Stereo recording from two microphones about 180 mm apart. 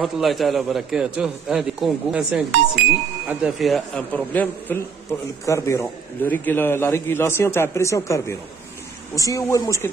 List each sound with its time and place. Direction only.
0.0 s a man's voice: centre (ahead or behind); by 9.8 s 15° left (ahead or behind)